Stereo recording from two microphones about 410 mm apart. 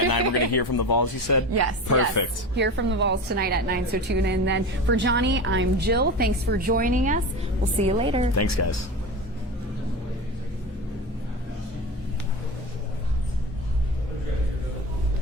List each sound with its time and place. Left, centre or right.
0.1 s speech: left
2.6 s a woman's voice: right
8.4 s a woman's voice: left